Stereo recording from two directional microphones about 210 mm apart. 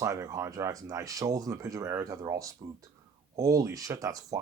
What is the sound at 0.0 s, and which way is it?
Speech, 15° right (ahead or behind).